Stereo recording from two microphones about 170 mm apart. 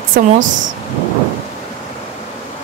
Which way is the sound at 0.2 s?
60° right (ahead or behind).